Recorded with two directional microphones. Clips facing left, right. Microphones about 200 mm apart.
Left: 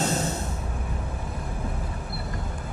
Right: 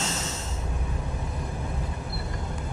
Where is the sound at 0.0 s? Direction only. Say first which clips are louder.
Left 6 dB; 55° left (ahead or behind).